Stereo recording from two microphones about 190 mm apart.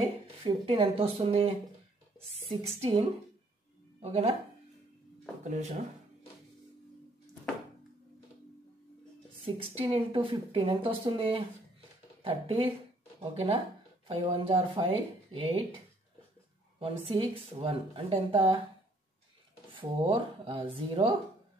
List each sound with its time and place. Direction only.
0.4 s speech: 30° right (ahead or behind)
5.4 s speech: 40° right (ahead or behind)
9.4 s speech: 30° right (ahead or behind)
16.8 s speech: 30° right (ahead or behind)
19.7 s speech: 25° right (ahead or behind)